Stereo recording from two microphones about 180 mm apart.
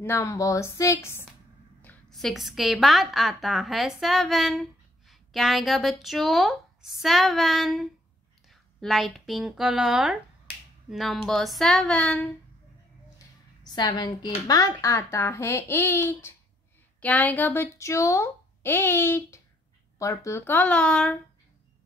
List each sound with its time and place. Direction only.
0.0 s a woman's voice: 15° left (ahead or behind)
13.7 s a woman's voice: 25° left (ahead or behind); by 21.2 s 5° left (ahead or behind)